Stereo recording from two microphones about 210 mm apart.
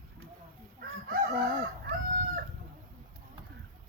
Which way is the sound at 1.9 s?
50° right (ahead or behind).